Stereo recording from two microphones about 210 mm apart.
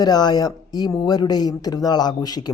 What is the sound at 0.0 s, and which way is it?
Speech, 20° left (ahead or behind).